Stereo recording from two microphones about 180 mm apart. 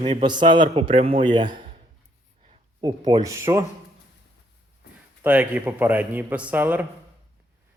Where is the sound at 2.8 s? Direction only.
25° right (ahead or behind).